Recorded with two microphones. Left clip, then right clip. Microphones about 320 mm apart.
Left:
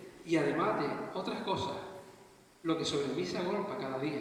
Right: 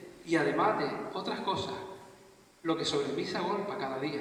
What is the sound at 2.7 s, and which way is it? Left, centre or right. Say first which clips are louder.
Speech: right 2 dB; right.